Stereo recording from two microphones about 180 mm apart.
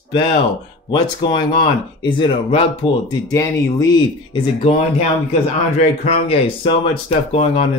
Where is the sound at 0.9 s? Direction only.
25° left (ahead or behind).